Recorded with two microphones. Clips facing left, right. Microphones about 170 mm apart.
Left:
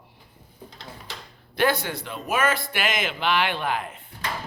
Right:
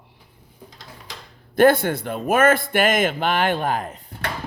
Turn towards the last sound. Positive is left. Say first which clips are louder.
# right 4 dB
turn(degrees=-40)  # may be behind; listen again after turning